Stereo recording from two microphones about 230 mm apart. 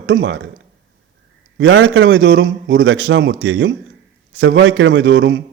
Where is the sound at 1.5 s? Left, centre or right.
Right.